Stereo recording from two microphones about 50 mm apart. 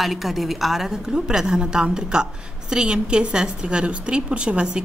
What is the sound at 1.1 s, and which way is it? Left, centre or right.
A woman's voice, centre.